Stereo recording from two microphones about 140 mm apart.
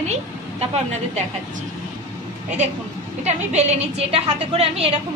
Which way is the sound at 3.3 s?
50° right (ahead or behind).